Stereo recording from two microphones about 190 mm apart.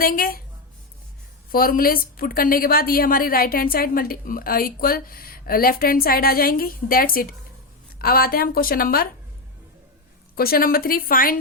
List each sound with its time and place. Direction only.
0.0 s a woman's voice: 50° left (ahead or behind)
1.5 s a woman's voice: 50° left (ahead or behind)
10.3 s a woman's voice: 50° left (ahead or behind)